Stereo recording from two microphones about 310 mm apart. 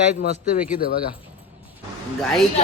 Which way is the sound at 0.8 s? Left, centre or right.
Left.